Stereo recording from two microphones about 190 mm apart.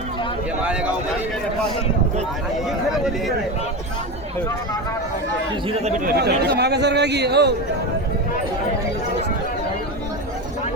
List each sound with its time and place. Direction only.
0.6 s speech: 5° right (ahead or behind)
2.6 s speech: centre (ahead or behind)
6.1 s speech: 60° right (ahead or behind)